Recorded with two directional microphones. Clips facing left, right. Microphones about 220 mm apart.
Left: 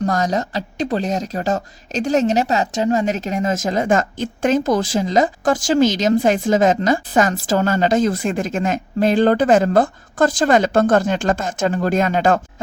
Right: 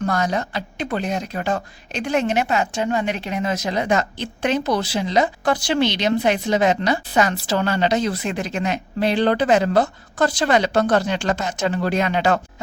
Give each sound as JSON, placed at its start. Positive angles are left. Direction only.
{"t": 0.0, "sound": "speech", "side_deg": 40}